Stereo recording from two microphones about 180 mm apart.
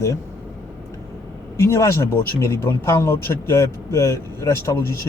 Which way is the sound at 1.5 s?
15° left (ahead or behind).